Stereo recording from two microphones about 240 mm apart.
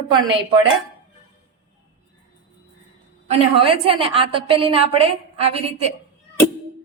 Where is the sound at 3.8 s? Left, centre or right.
Right.